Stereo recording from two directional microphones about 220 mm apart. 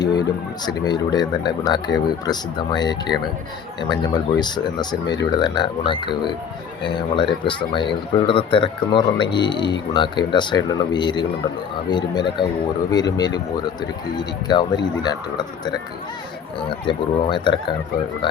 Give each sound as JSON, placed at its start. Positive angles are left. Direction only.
{"t": 0.0, "sound": "speech", "side_deg": 20}
{"t": 7.4, "sound": "speech", "side_deg": 20}